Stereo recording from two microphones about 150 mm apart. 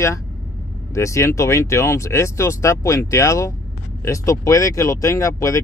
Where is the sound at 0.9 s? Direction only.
20° left (ahead or behind).